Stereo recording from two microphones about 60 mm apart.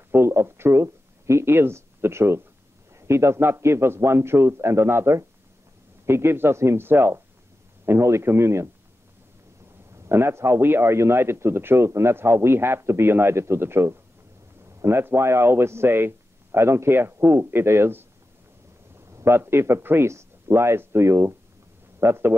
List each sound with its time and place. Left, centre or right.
0.1 s a man's voice: right
9.9 s a man's voice: right
19.1 s a man's voice: right
22.0 s speech: right